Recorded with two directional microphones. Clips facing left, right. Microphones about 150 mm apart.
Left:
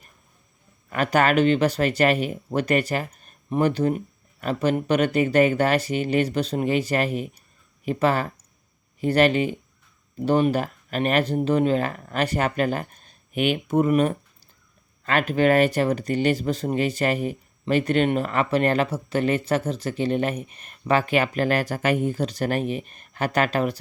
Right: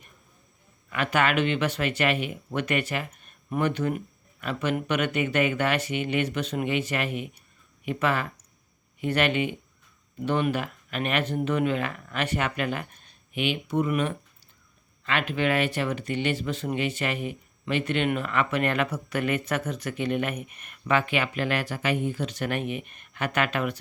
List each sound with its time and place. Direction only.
0.9 s speech: 40° left (ahead or behind)